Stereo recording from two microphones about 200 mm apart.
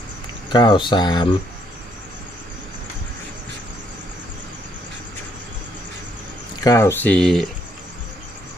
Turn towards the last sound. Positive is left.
turn(degrees=0)  # may be behind; listen again after turning